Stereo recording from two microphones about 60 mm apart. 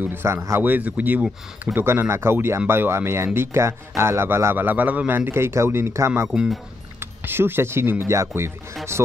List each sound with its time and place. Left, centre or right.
0.0 s a man's voice: right
0.6 s a man's voice: right
4.6 s a man's voice: right
6.2 s speech: centre
7.0 s speech: right
8.0 s a man's voice: right